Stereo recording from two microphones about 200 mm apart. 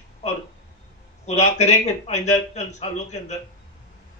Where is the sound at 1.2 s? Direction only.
35° left (ahead or behind).